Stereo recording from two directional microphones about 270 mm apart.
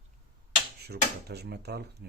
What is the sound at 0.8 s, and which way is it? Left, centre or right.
Speech, right.